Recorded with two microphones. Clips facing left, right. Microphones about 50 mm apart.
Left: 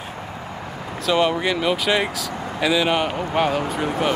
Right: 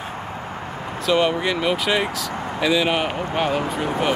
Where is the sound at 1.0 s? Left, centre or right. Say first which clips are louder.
Even; centre.